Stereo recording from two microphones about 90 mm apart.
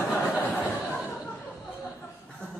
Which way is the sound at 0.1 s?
Centre (ahead or behind).